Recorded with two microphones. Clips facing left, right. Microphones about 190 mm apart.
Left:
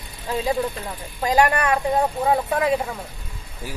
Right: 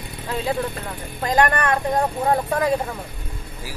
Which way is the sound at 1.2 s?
10° left (ahead or behind).